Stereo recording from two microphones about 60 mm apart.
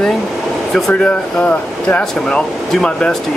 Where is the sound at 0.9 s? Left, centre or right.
Left.